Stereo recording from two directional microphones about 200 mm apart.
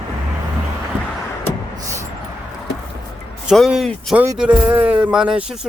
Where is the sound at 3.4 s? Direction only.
Centre (ahead or behind).